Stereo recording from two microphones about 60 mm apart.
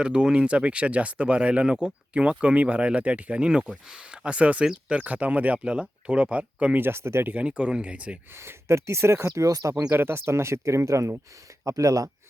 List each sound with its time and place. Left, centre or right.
0.0 s speech: centre
6.7 s speech: right
7.4 s speech: centre
8.3 s speech: right
9.9 s speech: right